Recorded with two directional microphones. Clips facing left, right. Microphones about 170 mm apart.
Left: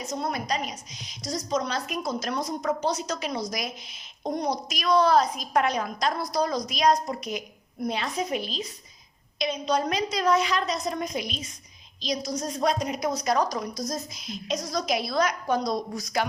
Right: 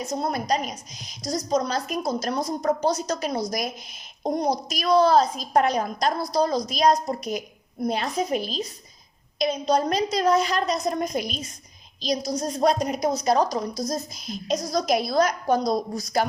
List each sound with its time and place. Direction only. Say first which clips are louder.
0.1 s a woman's voice: right 4 dB; 35° right (ahead or behind)
12.0 s a woman's voice: right 4 dB; 35° right (ahead or behind)
13.0 s a woman's voice: right 4 dB; 30° right (ahead or behind)